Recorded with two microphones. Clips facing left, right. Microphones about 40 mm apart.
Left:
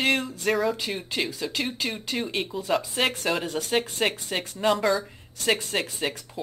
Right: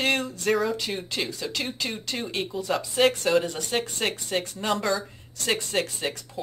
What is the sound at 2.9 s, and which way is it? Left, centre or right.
Speech, centre.